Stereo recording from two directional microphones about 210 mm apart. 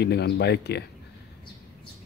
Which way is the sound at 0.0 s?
50° left (ahead or behind).